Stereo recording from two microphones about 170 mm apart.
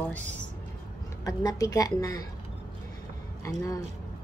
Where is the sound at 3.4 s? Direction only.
20° left (ahead or behind).